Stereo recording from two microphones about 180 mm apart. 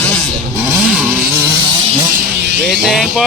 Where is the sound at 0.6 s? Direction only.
5° right (ahead or behind).